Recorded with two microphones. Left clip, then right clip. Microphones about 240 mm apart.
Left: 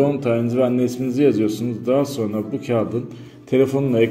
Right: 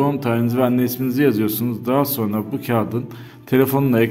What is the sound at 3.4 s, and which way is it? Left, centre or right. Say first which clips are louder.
Speech: right 1 dB; right.